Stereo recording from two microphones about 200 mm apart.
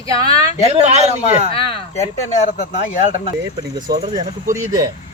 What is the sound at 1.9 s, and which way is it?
Speech, 35° left (ahead or behind).